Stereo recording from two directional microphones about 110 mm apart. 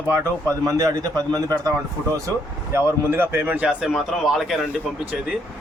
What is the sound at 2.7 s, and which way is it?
Speech, 20° right (ahead or behind).